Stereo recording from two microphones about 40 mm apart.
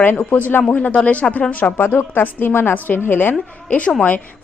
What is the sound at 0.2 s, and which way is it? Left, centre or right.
Speech, left.